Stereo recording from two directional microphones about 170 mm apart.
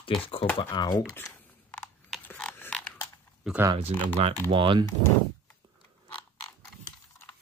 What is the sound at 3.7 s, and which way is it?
Speech, 30° right (ahead or behind).